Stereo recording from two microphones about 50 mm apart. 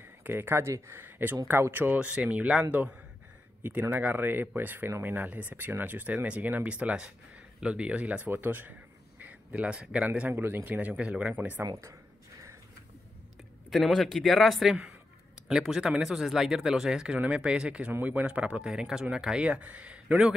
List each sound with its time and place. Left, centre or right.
0.2 s speech: right
2.0 s speech: right
3.9 s speech: right
6.1 s speech: right
6.4 s speech: right
8.3 s a man's voice: right
10.3 s speech: right
10.9 s speech: right
11.3 s speech: right
13.7 s speech: centre
19.4 s speech: right